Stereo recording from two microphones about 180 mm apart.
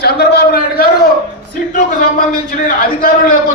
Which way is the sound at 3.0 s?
50° left (ahead or behind).